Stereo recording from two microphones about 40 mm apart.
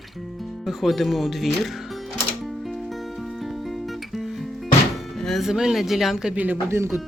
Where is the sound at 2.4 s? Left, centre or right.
Centre.